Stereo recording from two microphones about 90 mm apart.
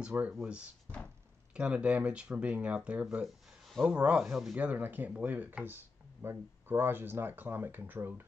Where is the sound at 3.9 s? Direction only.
15° right (ahead or behind).